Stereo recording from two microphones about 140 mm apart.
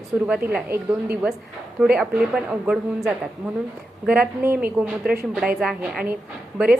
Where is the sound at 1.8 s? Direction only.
5° right (ahead or behind).